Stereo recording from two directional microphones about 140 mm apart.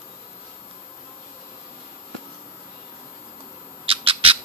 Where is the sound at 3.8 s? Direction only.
40° right (ahead or behind).